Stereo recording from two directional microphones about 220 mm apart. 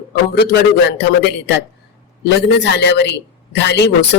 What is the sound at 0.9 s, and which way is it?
Speech, 50° left (ahead or behind).